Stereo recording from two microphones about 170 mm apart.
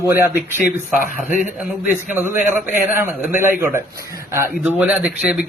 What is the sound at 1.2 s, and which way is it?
A man's voice, 5° right (ahead or behind).